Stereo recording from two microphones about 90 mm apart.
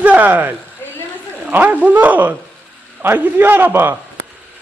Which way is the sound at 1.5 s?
20° right (ahead or behind).